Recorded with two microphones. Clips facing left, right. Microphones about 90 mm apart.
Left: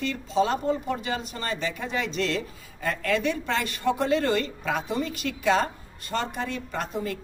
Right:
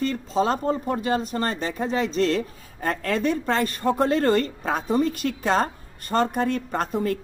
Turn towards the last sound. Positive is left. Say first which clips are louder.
# right 6 dB
turn(degrees=-50)  # may be behind; listen again after turning